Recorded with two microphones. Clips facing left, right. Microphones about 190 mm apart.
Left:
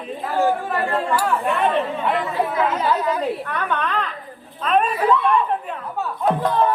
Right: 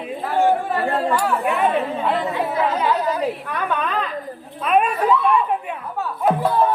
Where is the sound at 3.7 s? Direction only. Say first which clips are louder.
Right 2 dB; 5° right (ahead or behind).